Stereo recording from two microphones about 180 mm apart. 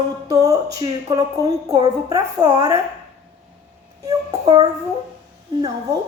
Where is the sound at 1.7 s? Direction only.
20° right (ahead or behind).